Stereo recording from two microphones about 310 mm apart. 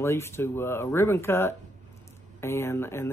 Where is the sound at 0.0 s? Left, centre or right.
Centre.